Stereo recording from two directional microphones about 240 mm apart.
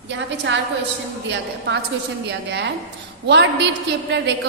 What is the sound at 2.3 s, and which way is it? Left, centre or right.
A woman's voice, right.